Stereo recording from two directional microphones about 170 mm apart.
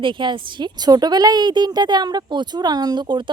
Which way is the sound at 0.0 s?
25° right (ahead or behind).